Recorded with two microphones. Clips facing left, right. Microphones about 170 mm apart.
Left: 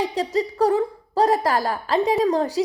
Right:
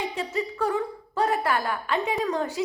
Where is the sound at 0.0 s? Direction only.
35° left (ahead or behind).